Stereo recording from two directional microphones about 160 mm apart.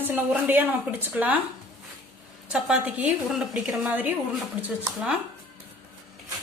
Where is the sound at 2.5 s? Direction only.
5° right (ahead or behind).